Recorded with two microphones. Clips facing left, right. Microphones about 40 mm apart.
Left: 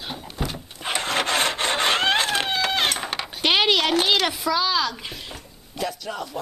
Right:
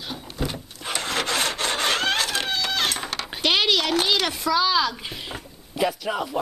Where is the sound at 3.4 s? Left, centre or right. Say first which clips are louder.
Left 2 dB; left.